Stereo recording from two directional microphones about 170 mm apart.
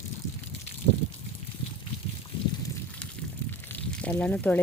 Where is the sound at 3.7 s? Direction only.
10° left (ahead or behind).